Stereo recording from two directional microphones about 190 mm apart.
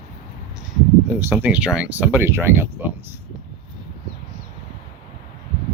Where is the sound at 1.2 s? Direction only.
10° right (ahead or behind).